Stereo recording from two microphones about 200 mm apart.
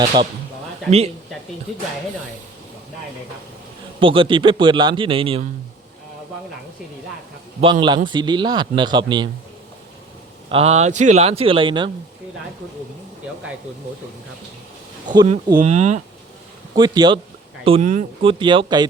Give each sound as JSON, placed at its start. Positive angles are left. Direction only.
{"t": 0.0, "sound": "speech", "side_deg": -20}
{"t": 4.0, "sound": "speech", "side_deg": -25}
{"t": 7.6, "sound": "speech", "side_deg": -25}
{"t": 10.5, "sound": "speech", "side_deg": -30}
{"t": 15.6, "sound": "speech", "side_deg": -35}
{"t": 16.7, "sound": "speech", "side_deg": -20}
{"t": 17.7, "sound": "speech", "side_deg": -40}
{"t": 18.2, "sound": "speech", "side_deg": -25}